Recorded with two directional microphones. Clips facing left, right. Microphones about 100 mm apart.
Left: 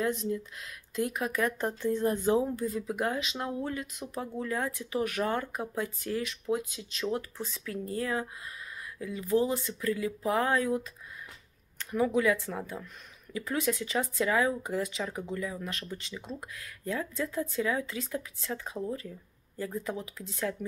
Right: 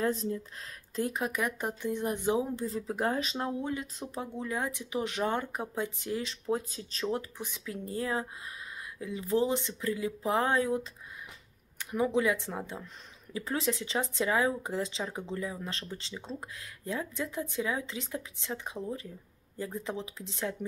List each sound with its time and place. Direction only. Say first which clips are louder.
0.0 s speech: even; 35° right (ahead or behind)
4.2 s speech: left 2 dB; 20° right (ahead or behind)
6.5 s speech: even; 35° right (ahead or behind)
7.2 s speech: left 1 dB; 15° right (ahead or behind)